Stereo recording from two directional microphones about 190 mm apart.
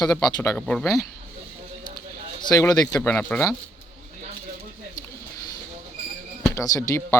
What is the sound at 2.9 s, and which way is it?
Speech, 10° left (ahead or behind).